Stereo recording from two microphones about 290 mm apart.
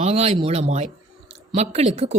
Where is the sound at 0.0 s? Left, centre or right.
Right.